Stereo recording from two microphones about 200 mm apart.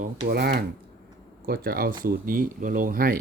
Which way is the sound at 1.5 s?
45° right (ahead or behind).